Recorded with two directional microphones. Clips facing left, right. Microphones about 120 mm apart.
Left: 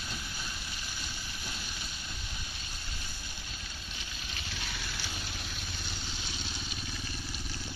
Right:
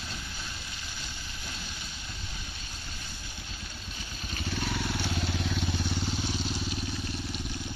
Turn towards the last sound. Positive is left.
turn(degrees=-90)